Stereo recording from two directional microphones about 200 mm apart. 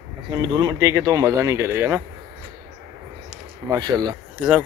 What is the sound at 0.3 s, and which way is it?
Speech, 20° right (ahead or behind).